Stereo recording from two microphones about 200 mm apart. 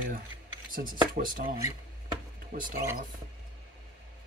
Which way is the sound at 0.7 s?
45° right (ahead or behind).